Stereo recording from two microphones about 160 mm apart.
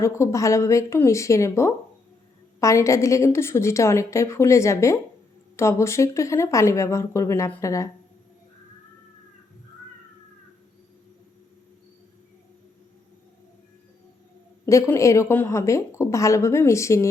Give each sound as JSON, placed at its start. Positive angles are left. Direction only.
{"t": 0.0, "sound": "a woman's voice", "side_deg": 20}
{"t": 14.7, "sound": "speech", "side_deg": 20}